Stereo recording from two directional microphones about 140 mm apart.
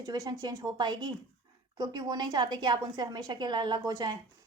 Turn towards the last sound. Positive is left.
turn(degrees=-30)  # may be behind; listen again after turning